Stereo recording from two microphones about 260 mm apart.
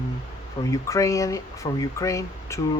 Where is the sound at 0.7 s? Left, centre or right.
Centre.